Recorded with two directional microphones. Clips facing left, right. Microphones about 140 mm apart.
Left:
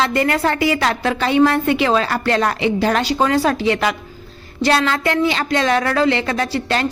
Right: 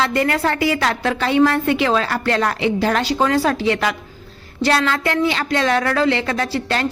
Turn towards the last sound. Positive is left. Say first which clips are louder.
# left 1 dB
turn(degrees=20)  # may be behind; listen again after turning